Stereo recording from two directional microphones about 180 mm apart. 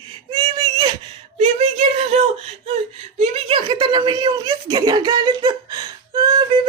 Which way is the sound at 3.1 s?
35° right (ahead or behind).